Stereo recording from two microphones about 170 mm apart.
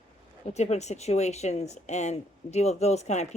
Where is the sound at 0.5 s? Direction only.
40° left (ahead or behind).